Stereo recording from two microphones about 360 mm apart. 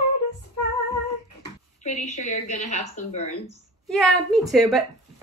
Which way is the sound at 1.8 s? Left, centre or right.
Centre.